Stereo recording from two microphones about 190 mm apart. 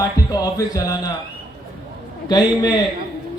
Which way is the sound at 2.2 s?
20° left (ahead or behind).